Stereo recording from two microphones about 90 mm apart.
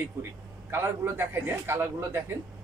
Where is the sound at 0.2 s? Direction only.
25° right (ahead or behind).